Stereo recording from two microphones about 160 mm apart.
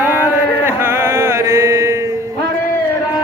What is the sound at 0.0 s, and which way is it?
Chant, 15° right (ahead or behind).